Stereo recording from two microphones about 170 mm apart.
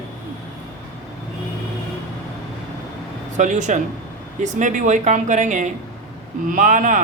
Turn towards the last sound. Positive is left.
turn(degrees=-50)  # may be behind; listen again after turning